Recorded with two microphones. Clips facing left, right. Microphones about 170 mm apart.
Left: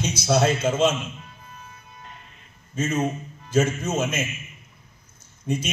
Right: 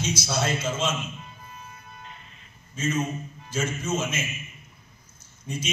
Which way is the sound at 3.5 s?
65° left (ahead or behind).